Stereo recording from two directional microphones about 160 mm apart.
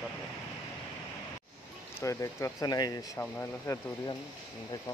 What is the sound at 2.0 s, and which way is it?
Speech, 20° left (ahead or behind).